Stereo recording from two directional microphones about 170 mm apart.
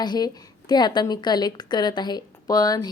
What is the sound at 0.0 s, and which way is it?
A woman's voice, 25° left (ahead or behind).